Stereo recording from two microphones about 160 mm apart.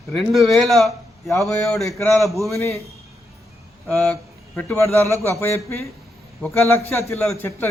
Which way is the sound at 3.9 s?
5° left (ahead or behind).